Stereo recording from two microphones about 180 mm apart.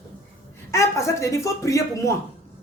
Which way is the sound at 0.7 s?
15° left (ahead or behind).